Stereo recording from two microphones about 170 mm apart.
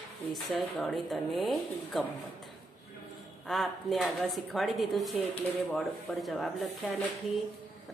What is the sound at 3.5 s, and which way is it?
A woman's voice, centre (ahead or behind).